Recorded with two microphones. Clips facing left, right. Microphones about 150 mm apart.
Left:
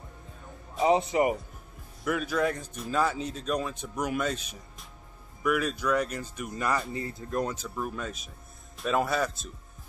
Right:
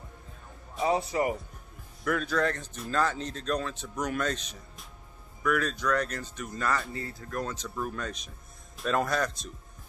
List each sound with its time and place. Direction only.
0.8 s speech: 20° left (ahead or behind)
2.0 s a man's voice: 10° left (ahead or behind)
7.5 s speech: 5° left (ahead or behind)